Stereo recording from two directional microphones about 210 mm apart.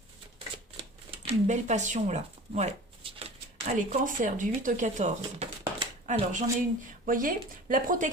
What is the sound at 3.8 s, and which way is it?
Speech, 35° right (ahead or behind).